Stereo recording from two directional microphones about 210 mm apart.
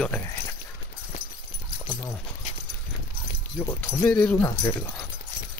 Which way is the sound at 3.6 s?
10° left (ahead or behind).